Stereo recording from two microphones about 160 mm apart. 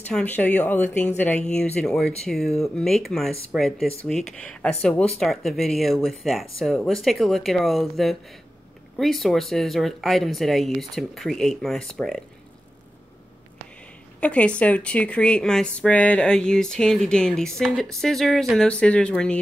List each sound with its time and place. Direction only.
0.0 s speech: 10° left (ahead or behind)
14.2 s speech: 10° left (ahead or behind)